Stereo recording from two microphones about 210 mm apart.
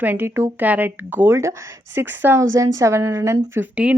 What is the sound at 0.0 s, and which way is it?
A woman's voice, 10° right (ahead or behind).